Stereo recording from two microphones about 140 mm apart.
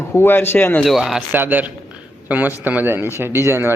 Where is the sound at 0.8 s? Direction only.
Centre (ahead or behind).